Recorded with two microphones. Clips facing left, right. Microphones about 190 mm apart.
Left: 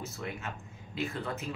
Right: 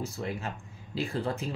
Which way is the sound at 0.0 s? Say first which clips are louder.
Right 5 dB; 35° right (ahead or behind).